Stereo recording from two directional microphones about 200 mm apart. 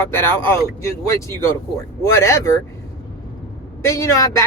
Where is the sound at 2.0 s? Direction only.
15° left (ahead or behind).